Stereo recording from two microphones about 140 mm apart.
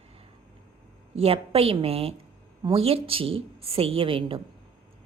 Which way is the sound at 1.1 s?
45° right (ahead or behind).